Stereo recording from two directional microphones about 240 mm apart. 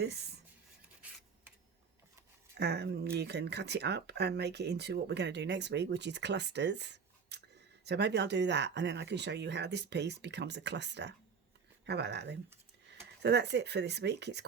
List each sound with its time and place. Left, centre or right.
2.6 s speech: right